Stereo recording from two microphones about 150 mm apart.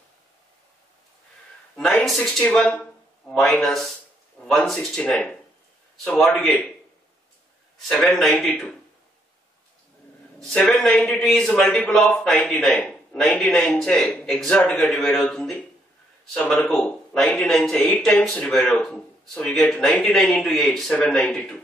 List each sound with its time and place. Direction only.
1.8 s speech: 5° left (ahead or behind)
7.9 s speech: 5° left (ahead or behind)
10.5 s speech: 5° left (ahead or behind)